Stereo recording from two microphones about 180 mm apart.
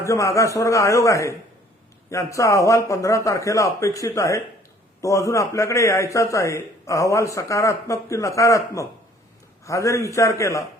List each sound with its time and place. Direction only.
0.1 s a man's voice: 15° left (ahead or behind)